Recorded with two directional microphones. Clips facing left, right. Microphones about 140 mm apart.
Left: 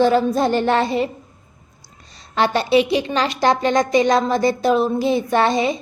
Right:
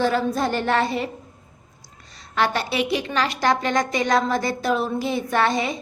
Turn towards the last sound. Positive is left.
turn(degrees=25)  # may be behind; listen again after turning